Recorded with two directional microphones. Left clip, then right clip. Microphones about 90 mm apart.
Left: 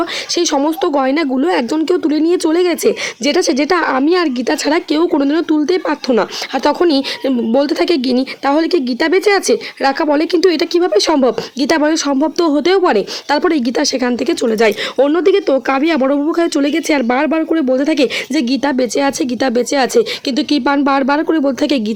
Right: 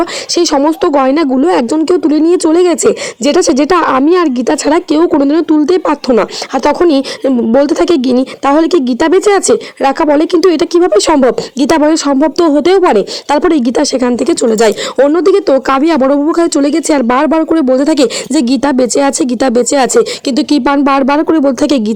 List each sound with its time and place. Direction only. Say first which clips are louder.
0.0 s speech: right 4 dB; 40° right (ahead or behind)